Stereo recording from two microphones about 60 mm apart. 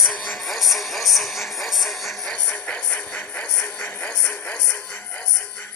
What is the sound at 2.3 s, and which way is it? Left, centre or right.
Music, centre.